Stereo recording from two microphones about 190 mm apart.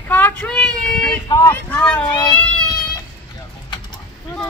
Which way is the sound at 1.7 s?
10° left (ahead or behind).